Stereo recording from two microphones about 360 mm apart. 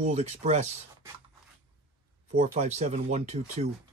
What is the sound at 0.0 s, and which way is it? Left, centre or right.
Speech, centre.